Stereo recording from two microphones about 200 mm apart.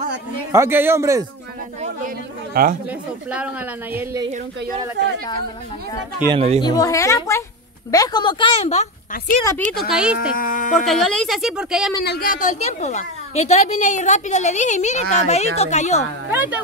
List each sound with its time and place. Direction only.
0.5 s speech: 10° right (ahead or behind)
1.8 s chatter: 45° right (ahead or behind)
2.9 s speech: 5° right (ahead or behind)
6.3 s speech: 30° right (ahead or behind)
6.6 s a woman's voice: 15° left (ahead or behind); by 9.4 s 35° left (ahead or behind)
9.7 s a woman's voice: centre (ahead or behind)
10.3 s a woman's voice: 40° left (ahead or behind)
10.9 s a woman's voice: centre (ahead or behind)
12.0 s a woman's voice: 50° left (ahead or behind); by 16.0 s 35° left (ahead or behind)
16.3 s speech: 10° right (ahead or behind)